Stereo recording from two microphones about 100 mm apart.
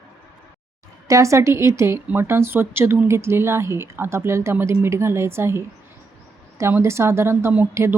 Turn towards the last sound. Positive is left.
turn(degrees=-25)  # may be behind; listen again after turning